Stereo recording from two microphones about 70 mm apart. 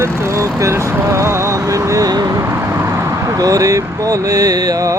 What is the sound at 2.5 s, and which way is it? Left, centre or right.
Vehicle, right.